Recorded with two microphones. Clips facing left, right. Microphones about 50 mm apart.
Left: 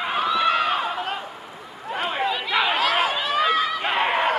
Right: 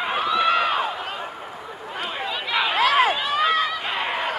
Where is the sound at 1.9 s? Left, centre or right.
Centre.